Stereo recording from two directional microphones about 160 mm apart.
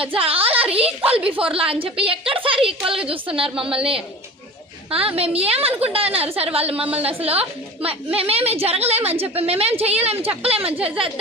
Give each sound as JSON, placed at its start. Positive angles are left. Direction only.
{"t": 0.0, "sound": "a woman's voice", "side_deg": -35}